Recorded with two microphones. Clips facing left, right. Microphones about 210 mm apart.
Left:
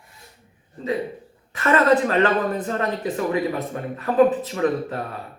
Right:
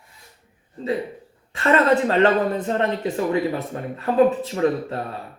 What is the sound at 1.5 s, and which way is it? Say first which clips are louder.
Speech: even; 30° right (ahead or behind).